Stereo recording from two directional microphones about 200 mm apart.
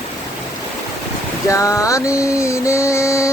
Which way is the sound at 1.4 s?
15° left (ahead or behind).